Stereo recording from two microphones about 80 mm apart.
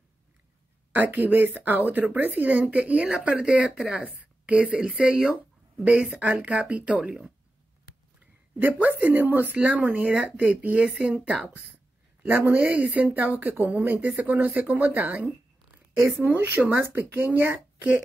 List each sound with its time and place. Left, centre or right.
0.9 s speech: right
8.2 s speech: right